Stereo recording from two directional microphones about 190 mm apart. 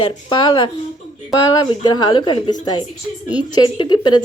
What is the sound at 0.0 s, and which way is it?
A woman's voice, 25° left (ahead or behind).